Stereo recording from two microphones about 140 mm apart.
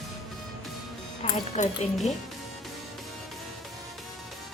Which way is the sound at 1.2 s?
60° left (ahead or behind).